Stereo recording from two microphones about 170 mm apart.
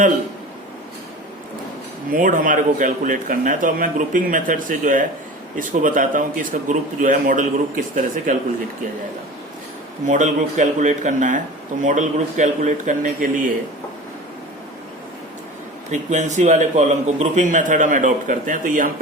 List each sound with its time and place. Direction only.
2.0 s speech: 50° right (ahead or behind)
10.1 s speech: 45° right (ahead or behind)
15.9 s speech: 45° right (ahead or behind)